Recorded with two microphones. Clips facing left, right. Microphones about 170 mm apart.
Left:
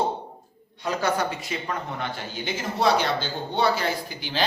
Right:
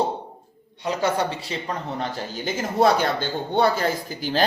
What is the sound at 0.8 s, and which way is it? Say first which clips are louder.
Speech: right 2 dB; 25° right (ahead or behind).